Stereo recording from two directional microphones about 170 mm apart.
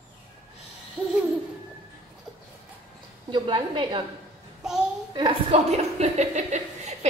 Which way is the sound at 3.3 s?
30° right (ahead or behind).